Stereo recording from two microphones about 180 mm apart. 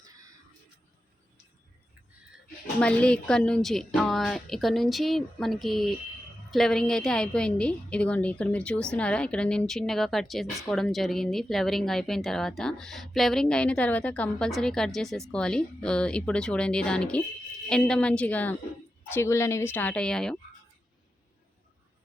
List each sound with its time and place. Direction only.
2.8 s speech: 5° left (ahead or behind)